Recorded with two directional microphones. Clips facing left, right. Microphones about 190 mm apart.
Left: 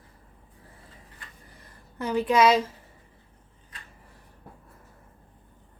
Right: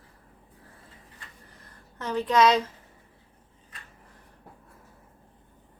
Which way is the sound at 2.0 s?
10° left (ahead or behind).